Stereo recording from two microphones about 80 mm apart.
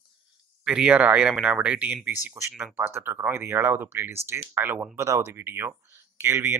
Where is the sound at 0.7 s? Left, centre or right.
Centre.